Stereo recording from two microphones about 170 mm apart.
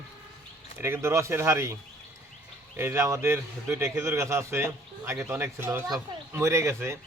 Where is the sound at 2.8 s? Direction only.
15° right (ahead or behind).